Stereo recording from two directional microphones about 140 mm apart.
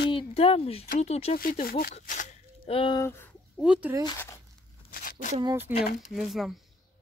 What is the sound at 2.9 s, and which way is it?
Speech, 20° left (ahead or behind).